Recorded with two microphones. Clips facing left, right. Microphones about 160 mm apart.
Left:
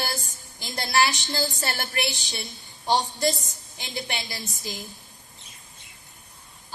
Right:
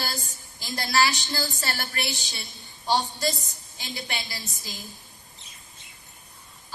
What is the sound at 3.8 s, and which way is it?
Speech, 20° left (ahead or behind).